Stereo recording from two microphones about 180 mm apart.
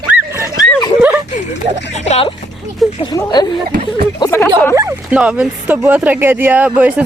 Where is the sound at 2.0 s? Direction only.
40° left (ahead or behind).